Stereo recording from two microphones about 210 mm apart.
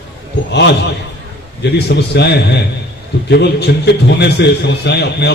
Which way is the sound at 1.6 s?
55° left (ahead or behind).